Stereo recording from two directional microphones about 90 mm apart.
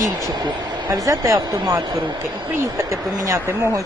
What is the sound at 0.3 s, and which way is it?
Speech, 60° right (ahead or behind).